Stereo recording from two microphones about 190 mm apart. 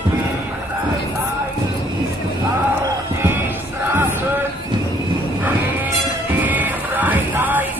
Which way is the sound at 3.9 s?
10° right (ahead or behind).